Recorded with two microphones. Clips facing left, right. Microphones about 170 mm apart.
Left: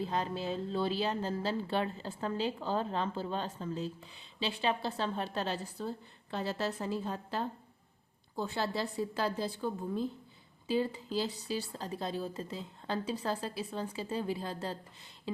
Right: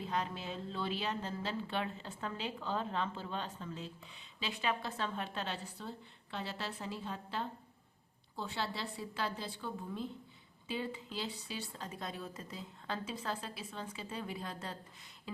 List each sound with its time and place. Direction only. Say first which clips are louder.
0.0 s a woman's voice: left 4 dB; 35° left (ahead or behind)